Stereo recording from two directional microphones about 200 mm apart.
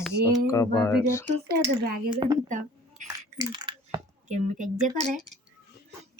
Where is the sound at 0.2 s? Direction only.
50° right (ahead or behind).